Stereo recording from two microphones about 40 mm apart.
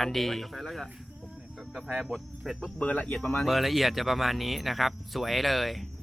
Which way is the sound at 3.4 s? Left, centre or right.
Centre.